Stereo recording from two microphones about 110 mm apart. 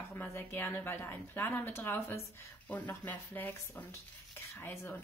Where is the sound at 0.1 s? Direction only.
20° left (ahead or behind).